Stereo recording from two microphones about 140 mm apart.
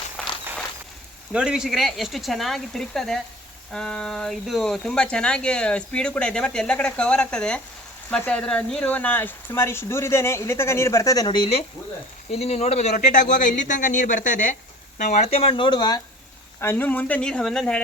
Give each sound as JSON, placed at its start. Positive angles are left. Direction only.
{"t": 0.2, "sound": "walk", "side_deg": 5}
{"t": 1.3, "sound": "speech", "side_deg": -5}
{"t": 16.6, "sound": "speech", "side_deg": 15}